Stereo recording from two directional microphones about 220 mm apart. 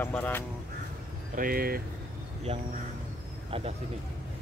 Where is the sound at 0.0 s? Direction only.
10° left (ahead or behind).